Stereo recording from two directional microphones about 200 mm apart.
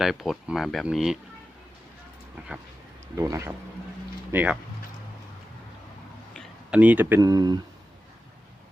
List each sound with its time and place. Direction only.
0.0 s speech: centre (ahead or behind)
3.2 s speech: 15° right (ahead or behind)
6.3 s speech: centre (ahead or behind); by 7.6 s 20° right (ahead or behind)